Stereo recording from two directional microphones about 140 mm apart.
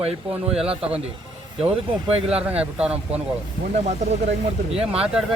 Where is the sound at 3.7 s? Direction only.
55° right (ahead or behind).